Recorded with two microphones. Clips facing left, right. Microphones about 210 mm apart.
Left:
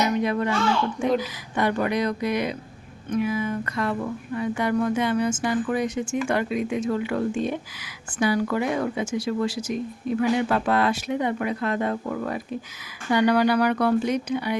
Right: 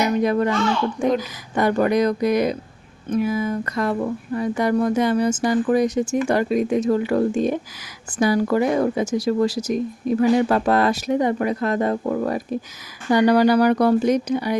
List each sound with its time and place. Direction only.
0.2 s speech: 40° right (ahead or behind)